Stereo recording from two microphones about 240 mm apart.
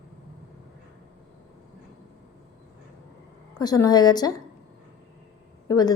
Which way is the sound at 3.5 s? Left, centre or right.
Centre.